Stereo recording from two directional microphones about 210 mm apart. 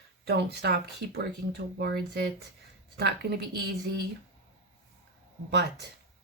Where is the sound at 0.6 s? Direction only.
50° right (ahead or behind).